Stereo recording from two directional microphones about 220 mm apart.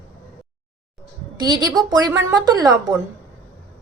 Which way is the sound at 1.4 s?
20° right (ahead or behind).